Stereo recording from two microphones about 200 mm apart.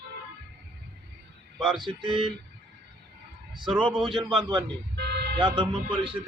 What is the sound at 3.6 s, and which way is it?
Speech, centre (ahead or behind).